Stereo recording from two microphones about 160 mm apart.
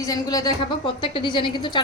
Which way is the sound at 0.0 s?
25° left (ahead or behind).